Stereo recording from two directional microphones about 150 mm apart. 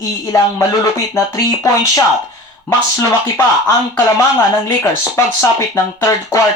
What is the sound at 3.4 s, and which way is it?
Speech, 20° left (ahead or behind).